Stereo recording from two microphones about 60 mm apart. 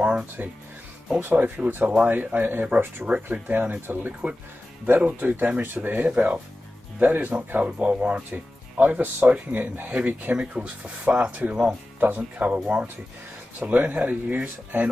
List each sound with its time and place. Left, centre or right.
0.4 s speech: right